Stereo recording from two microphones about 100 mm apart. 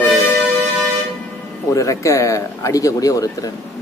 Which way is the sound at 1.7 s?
30° left (ahead or behind).